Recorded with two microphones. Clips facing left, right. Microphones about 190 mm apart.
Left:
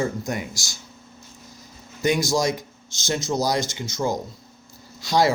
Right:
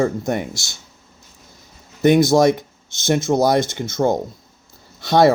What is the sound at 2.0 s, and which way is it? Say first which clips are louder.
Speech: right 9 dB; 60° right (ahead or behind).